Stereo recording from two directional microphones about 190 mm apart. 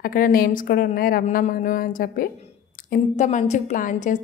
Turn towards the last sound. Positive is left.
turn(degrees=40)  # may be behind; listen again after turning